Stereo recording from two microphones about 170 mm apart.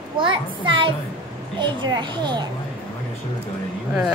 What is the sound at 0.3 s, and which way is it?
A child's voice, 30° right (ahead or behind).